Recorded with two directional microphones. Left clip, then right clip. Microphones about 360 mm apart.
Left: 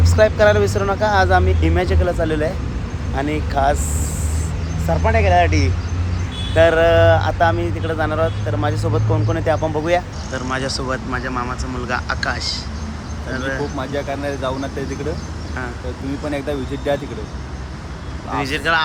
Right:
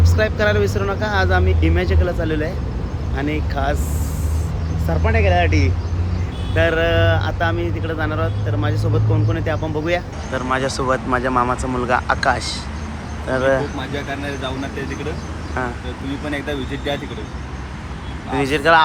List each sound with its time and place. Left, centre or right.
0.0 s speech: centre
4.9 s speech: centre
13.9 s speech: centre
16.5 s speech: centre
18.3 s speech: centre